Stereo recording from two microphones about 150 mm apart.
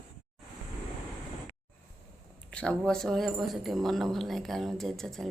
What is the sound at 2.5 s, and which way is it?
A woman's voice, 5° left (ahead or behind).